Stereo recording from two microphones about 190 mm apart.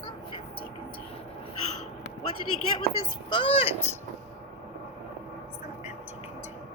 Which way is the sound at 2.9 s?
25° left (ahead or behind).